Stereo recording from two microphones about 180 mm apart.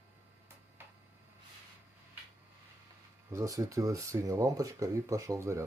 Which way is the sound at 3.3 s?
15° right (ahead or behind).